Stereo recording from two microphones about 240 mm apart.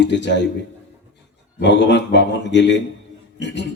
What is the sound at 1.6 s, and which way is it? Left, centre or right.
A man's voice, left.